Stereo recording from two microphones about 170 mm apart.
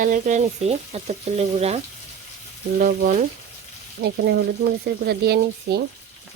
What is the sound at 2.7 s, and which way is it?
Speech, 50° right (ahead or behind).